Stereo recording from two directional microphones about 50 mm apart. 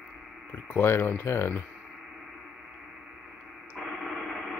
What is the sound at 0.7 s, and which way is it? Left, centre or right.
Speech, left.